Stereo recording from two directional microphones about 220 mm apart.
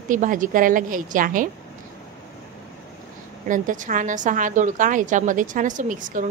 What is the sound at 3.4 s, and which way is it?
A woman's voice, 35° right (ahead or behind).